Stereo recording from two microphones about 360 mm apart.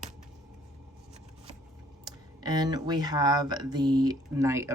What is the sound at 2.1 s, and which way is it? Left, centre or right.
Speech, centre.